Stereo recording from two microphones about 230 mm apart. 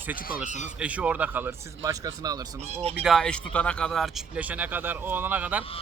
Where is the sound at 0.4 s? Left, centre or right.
Left.